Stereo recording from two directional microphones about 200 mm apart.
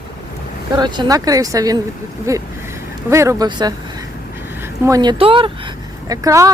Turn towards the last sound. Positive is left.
turn(degrees=-15)  # may be behind; listen again after turning